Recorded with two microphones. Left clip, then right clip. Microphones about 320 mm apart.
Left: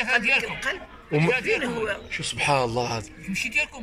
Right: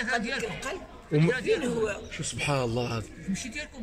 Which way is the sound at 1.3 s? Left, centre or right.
Centre.